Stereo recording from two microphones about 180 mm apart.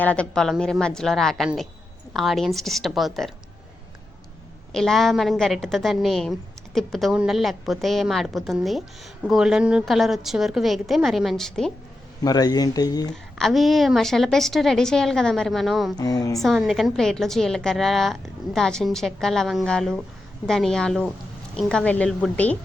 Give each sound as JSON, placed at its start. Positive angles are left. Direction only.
{"t": 0.0, "sound": "a woman's voice", "side_deg": 5}
{"t": 4.7, "sound": "a woman's voice", "side_deg": 0}
{"t": 12.2, "sound": "speech", "side_deg": 20}
{"t": 13.1, "sound": "a woman's voice", "side_deg": 0}
{"t": 16.0, "sound": "speech", "side_deg": 20}
{"t": 16.4, "sound": "a woman's voice", "side_deg": 0}